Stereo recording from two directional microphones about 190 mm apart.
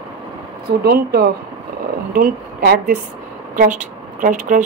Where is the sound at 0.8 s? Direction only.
55° right (ahead or behind).